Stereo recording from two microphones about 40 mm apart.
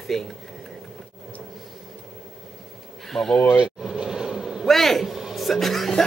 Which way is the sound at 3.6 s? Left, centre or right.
Centre.